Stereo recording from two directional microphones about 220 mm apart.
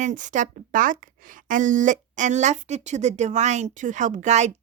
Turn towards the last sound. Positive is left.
turn(degrees=-30)  # may be behind; listen again after turning